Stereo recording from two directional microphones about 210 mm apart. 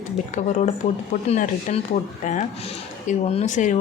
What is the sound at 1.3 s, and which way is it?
A woman's voice, 35° left (ahead or behind).